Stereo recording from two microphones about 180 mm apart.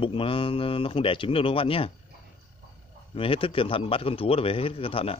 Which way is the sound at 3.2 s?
30° left (ahead or behind).